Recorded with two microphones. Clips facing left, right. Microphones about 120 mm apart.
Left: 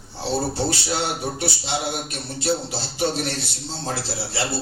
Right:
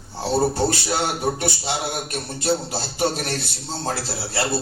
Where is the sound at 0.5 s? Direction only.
45° right (ahead or behind).